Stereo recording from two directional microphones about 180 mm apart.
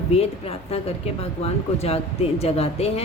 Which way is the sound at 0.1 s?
35° left (ahead or behind).